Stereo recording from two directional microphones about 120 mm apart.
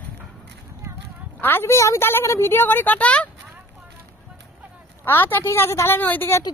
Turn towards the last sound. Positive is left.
turn(degrees=20)  # may be behind; listen again after turning